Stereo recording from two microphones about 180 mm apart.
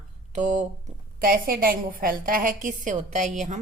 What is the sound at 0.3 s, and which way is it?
Speech, 40° right (ahead or behind).